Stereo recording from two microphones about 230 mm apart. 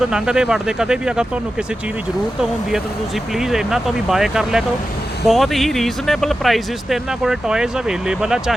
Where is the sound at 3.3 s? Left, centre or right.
Centre.